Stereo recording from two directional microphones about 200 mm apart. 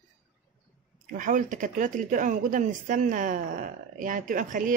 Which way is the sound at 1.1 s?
40° right (ahead or behind).